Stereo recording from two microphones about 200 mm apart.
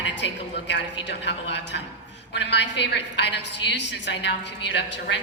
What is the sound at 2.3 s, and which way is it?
A woman's voice, 60° left (ahead or behind).